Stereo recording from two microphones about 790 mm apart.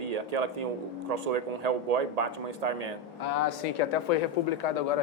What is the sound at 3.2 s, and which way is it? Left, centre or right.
Speech, left.